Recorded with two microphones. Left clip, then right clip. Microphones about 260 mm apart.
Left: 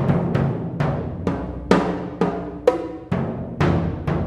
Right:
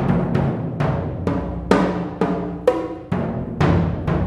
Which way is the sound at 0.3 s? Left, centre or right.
Left.